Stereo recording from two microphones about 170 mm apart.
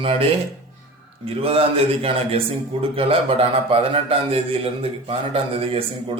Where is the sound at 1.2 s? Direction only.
35° right (ahead or behind).